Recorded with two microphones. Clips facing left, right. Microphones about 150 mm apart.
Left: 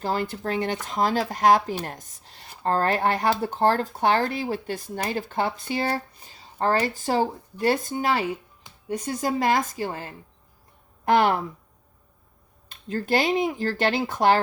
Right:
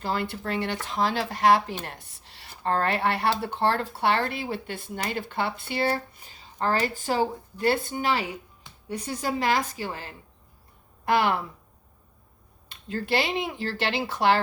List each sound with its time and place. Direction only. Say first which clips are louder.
0.0 s speech: left 2 dB; 45° left (ahead or behind)
9.2 s speech: left 2 dB; 45° left (ahead or behind)
11.1 s speech: left 3 dB; 50° left (ahead or behind)
12.6 s speech: left 3 dB; 45° left (ahead or behind)